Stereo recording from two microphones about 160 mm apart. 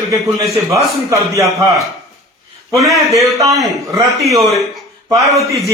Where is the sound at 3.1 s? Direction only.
20° right (ahead or behind).